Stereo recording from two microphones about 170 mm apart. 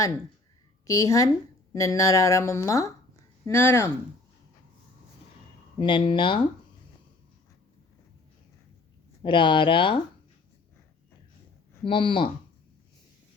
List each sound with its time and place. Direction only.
0.9 s speech: 20° left (ahead or behind)
5.8 s speech: 30° left (ahead or behind)
9.2 s speech: 30° left (ahead or behind)
11.9 s speech: 30° left (ahead or behind)